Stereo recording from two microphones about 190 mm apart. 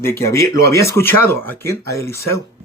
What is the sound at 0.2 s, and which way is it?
Speech, 15° left (ahead or behind).